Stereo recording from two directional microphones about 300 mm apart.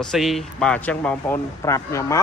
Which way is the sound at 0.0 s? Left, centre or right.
Centre.